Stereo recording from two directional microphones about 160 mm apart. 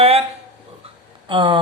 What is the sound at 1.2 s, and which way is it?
Speech, 30° right (ahead or behind).